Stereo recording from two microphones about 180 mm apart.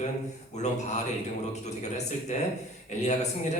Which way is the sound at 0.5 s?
40° left (ahead or behind).